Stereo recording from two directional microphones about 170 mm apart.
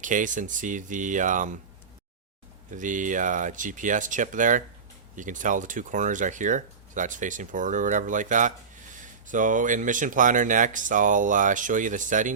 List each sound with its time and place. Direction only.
0.0 s speech: 50° right (ahead or behind)
2.6 s speech: 50° right (ahead or behind)